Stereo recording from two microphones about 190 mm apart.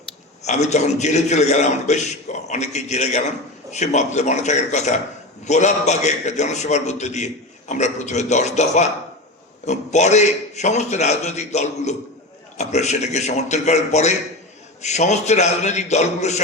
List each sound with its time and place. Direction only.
0.4 s a man's voice: 35° left (ahead or behind)